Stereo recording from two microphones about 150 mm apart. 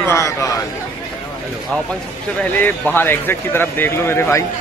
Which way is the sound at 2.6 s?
15° left (ahead or behind).